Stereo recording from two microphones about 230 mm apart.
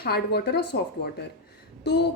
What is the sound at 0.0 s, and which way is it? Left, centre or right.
Speech, left.